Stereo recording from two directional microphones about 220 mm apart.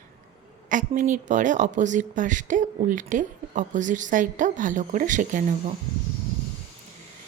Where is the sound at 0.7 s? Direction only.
35° right (ahead or behind).